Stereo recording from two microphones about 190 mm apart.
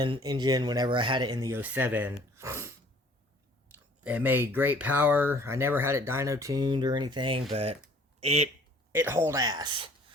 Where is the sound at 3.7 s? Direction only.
10° right (ahead or behind); by 8.5 s 35° right (ahead or behind).